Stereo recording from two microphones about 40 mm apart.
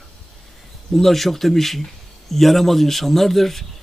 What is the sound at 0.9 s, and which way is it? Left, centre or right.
Speech, centre.